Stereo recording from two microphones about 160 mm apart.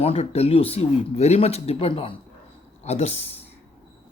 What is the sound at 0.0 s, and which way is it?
Speech, 40° left (ahead or behind).